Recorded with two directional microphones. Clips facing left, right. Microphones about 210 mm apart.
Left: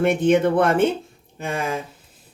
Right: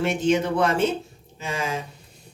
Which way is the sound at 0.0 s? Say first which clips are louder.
Left 5 dB; 55° left (ahead or behind).